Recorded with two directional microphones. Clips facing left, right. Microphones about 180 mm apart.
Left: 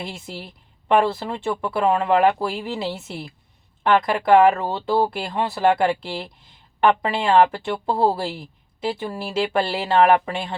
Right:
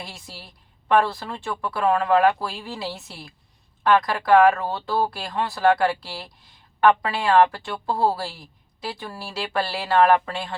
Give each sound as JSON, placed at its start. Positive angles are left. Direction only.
{"t": 0.0, "sound": "speech", "side_deg": 25}